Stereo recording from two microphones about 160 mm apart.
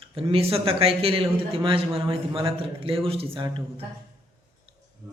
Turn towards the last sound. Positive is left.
turn(degrees=-30)  # may be behind; listen again after turning